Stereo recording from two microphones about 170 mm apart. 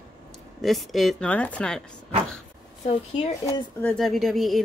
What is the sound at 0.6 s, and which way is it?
Speech, centre (ahead or behind).